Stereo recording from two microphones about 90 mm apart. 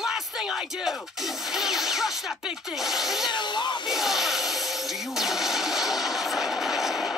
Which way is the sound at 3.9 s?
5° right (ahead or behind).